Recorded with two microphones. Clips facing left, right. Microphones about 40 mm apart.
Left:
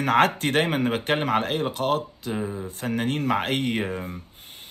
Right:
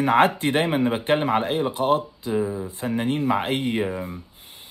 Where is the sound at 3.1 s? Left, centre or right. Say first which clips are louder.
Right 3 dB; left.